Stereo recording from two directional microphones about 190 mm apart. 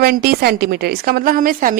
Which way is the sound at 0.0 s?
55° right (ahead or behind).